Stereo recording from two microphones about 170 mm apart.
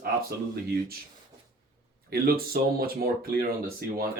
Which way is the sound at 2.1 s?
60° right (ahead or behind).